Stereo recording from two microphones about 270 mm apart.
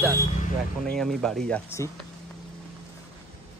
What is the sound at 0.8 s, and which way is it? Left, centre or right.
Speech, centre.